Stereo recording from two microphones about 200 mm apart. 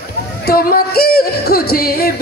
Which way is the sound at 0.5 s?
50° left (ahead or behind).